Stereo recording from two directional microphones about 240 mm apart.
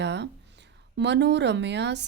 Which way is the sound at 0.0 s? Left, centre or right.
Right.